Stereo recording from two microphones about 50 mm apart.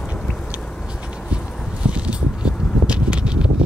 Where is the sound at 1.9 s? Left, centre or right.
Right.